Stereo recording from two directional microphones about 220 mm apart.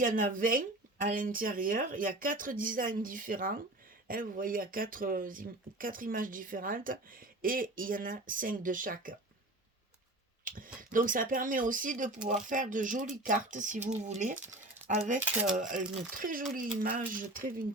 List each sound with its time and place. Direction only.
0.0 s speech: 40° right (ahead or behind)
10.4 s speech: 40° right (ahead or behind)